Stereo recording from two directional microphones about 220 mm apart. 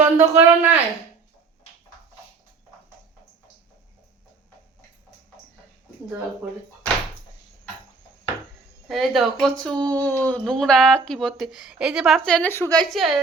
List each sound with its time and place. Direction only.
0.0 s speech: 10° right (ahead or behind)
8.9 s speech: centre (ahead or behind)
9.8 s speech: 15° right (ahead or behind)
10.2 s speech: 5° left (ahead or behind)